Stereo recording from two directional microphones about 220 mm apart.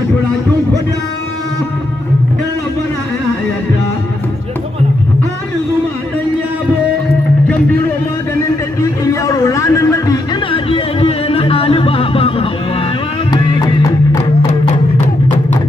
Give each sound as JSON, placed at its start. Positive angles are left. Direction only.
{"t": 8.8, "sound": "music", "side_deg": 15}